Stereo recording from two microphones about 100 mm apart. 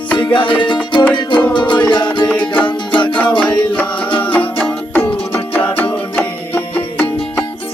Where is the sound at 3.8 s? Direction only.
15° left (ahead or behind).